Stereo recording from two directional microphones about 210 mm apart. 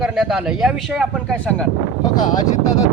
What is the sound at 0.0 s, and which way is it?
A man's voice, centre (ahead or behind).